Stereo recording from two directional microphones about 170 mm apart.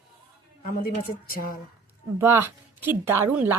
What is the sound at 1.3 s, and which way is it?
Speech, 60° left (ahead or behind).